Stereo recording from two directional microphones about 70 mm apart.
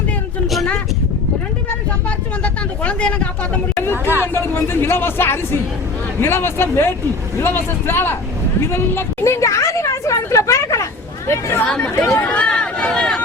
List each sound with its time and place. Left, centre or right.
0.4 s a sound: centre
2.0 s vehicle: centre
3.9 s hubbub: right
4.4 s speech: left
8.6 s a sound: left
11.3 s speech: left
12.1 s run: left